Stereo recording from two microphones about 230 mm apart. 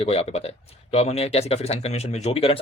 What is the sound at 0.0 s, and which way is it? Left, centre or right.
Speech, left.